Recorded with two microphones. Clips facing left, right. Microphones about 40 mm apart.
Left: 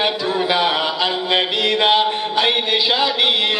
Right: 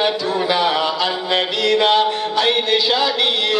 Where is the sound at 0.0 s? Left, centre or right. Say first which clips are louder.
Right 1 dB; left.